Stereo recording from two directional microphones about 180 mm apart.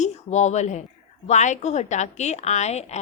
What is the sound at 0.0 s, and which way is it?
A woman's voice, 40° left (ahead or behind).